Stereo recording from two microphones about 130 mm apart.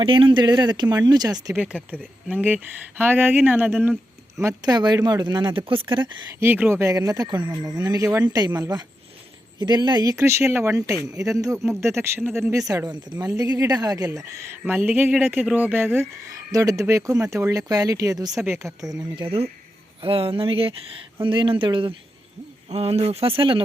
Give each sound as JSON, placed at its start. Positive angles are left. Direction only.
{"t": 0.0, "sound": "speech", "side_deg": -40}
{"t": 1.5, "sound": "speech", "side_deg": -10}
{"t": 4.4, "sound": "speech", "side_deg": -25}
{"t": 6.4, "sound": "speech", "side_deg": -15}
{"t": 16.2, "sound": "speech", "side_deg": -25}
{"t": 22.7, "sound": "speech", "side_deg": -50}